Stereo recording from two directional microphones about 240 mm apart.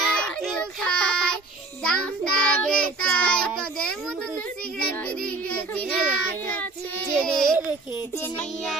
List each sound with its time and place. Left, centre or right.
0.0 s child singing: centre
4.9 s child singing: centre